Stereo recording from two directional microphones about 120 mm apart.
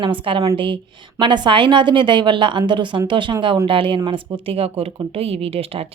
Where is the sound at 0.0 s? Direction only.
45° right (ahead or behind).